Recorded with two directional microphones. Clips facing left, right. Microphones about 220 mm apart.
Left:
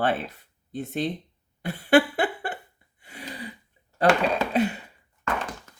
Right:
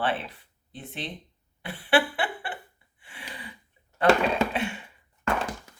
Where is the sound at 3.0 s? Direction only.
40° left (ahead or behind).